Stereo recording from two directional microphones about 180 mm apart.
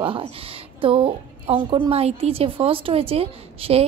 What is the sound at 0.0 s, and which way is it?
A woman's voice, 30° right (ahead or behind).